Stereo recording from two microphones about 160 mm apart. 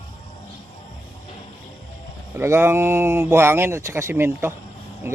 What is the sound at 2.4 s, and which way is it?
Speech, 15° right (ahead or behind).